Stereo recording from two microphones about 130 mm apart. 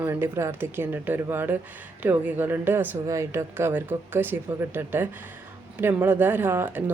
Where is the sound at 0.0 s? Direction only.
15° right (ahead or behind).